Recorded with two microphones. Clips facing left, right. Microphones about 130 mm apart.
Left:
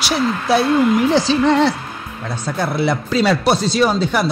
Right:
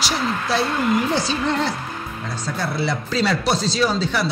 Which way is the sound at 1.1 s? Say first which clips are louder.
Left 7 dB; 90° left.